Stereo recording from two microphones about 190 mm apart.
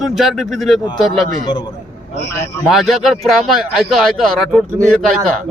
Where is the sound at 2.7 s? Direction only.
Centre (ahead or behind).